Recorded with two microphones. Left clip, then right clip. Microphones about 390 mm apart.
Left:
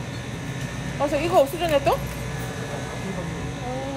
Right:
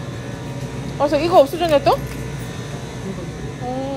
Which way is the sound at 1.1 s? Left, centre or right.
Right.